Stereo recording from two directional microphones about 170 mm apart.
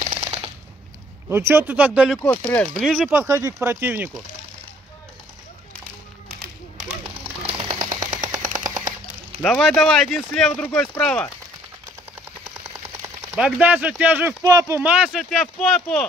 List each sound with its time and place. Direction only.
1.3 s speech: 15° right (ahead or behind)
7.5 s machine gun: 30° right (ahead or behind)
8.6 s machine gun: 45° right (ahead or behind)
9.4 s speech: 5° left (ahead or behind)
13.0 s speech: 10° right (ahead or behind)
14.5 s speech: 20° right (ahead or behind)
14.8 s speech: 5° right (ahead or behind)